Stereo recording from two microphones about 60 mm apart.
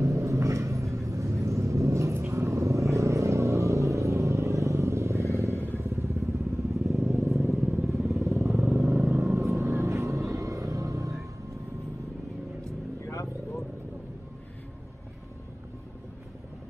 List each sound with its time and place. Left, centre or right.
0.0 s vehicle: right
5.6 s motorcycle: right
5.9 s motorcycle: right
6.9 s vehicle: centre
8.2 s motorcycle: right
8.5 s vehicle: centre
9.3 s vehicle: right
13.0 s vehicle: left